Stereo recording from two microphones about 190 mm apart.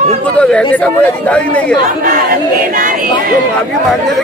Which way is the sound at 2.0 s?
45° right (ahead or behind).